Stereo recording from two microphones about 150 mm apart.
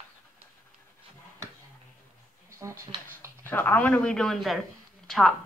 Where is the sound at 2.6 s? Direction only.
20° right (ahead or behind).